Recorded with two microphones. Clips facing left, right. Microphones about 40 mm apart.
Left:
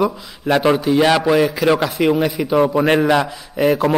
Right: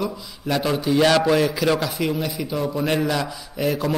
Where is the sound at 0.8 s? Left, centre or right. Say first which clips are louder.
Left 3 dB; centre.